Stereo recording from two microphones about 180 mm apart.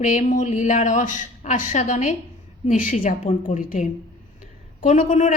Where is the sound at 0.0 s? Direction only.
45° left (ahead or behind).